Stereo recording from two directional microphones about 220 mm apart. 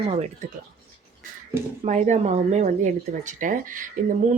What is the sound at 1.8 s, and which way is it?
Speech, 35° right (ahead or behind).